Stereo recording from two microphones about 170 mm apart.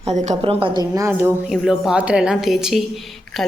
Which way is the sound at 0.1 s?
40° right (ahead or behind).